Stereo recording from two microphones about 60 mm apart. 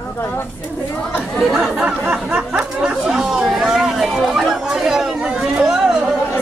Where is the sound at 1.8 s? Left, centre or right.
Right.